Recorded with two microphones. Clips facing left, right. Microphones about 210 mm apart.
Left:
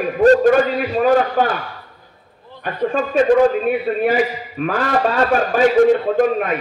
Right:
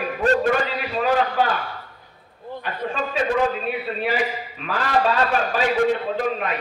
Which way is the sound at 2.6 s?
50° left (ahead or behind).